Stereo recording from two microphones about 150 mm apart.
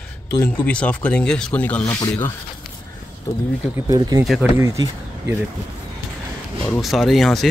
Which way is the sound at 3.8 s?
25° right (ahead or behind).